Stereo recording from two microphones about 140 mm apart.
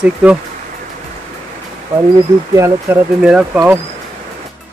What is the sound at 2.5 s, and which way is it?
Speech, 20° right (ahead or behind).